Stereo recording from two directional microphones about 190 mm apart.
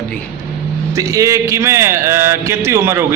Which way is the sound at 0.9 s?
15° right (ahead or behind).